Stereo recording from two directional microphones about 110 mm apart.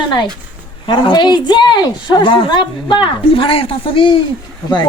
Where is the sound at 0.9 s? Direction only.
45° left (ahead or behind).